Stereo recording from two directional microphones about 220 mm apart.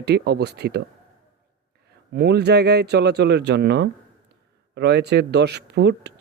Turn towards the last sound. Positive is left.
turn(degrees=-50)  # may be behind; listen again after turning